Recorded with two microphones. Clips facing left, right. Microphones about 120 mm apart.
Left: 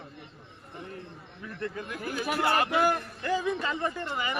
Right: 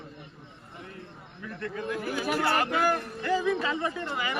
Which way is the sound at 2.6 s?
5° left (ahead or behind).